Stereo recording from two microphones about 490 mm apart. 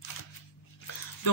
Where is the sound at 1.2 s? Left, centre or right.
Left.